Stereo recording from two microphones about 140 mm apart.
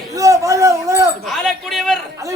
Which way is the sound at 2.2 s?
20° right (ahead or behind).